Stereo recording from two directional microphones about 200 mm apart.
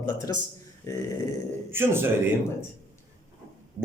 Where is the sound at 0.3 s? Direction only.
15° left (ahead or behind).